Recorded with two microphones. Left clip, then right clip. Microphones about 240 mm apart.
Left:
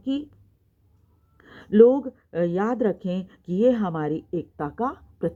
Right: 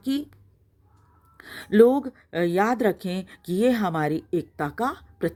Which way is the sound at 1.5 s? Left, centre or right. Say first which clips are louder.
Left 1 dB; right.